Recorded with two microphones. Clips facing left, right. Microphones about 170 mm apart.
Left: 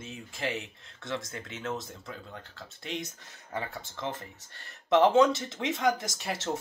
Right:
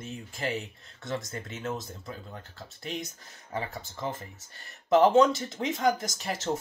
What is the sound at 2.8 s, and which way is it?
Speech, centre (ahead or behind).